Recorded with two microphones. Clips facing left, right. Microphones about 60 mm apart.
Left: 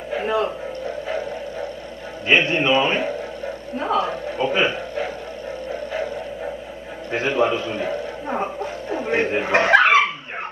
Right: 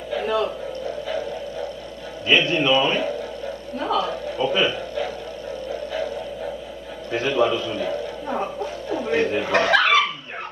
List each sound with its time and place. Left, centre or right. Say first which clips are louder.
0.1 s radio: left 1 dB; left
2.2 s a man's voice: left 1 dB; left
5.7 s music: left 1 dB; left
7.1 s a man's voice: even; left